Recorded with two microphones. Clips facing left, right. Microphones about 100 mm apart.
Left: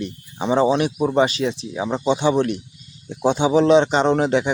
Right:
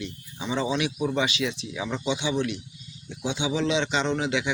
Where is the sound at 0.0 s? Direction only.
50° left (ahead or behind).